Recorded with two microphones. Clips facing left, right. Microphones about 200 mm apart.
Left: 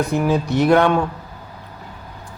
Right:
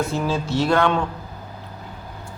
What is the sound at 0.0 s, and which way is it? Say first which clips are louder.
Speech: left 4 dB; 15° left (ahead or behind).